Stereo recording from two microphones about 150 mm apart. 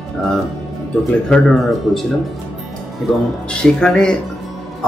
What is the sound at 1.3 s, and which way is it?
Speech, centre (ahead or behind).